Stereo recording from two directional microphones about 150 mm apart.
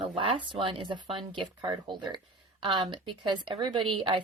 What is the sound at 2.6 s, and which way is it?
Speech, 35° right (ahead or behind).